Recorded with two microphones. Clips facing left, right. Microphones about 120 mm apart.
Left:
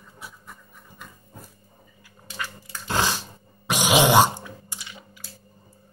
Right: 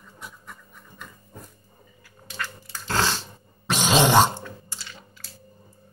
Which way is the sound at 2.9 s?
15° left (ahead or behind).